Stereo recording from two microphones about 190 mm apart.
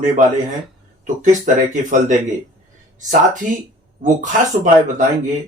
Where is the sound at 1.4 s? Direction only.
40° right (ahead or behind).